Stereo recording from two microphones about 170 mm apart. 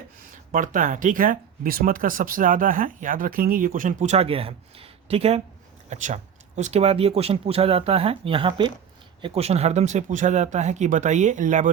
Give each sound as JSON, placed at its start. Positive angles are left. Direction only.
{"t": 0.5, "sound": "speech", "side_deg": -50}